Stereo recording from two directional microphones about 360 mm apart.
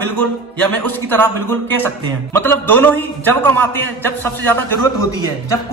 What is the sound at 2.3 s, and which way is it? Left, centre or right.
A man's voice, centre.